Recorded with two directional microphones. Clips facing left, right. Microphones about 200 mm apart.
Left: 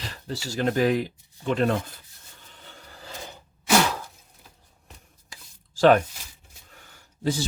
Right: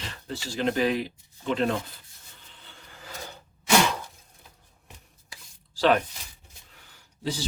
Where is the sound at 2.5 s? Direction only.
45° left (ahead or behind).